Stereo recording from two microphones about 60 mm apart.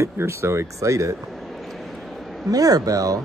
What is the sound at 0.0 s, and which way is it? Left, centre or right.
Speech, right.